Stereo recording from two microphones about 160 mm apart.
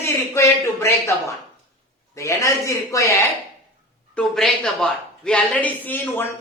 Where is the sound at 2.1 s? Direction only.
20° left (ahead or behind).